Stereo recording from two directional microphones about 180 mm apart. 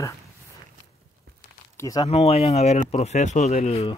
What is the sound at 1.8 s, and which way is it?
Speech, 20° left (ahead or behind).